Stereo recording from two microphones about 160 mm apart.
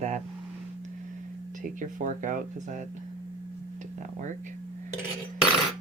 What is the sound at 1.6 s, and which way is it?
Speech, 55° right (ahead or behind).